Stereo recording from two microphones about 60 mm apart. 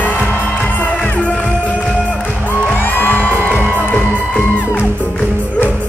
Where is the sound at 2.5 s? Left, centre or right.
Left.